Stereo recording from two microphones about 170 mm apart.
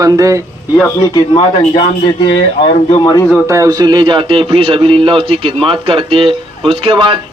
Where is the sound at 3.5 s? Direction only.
20° right (ahead or behind).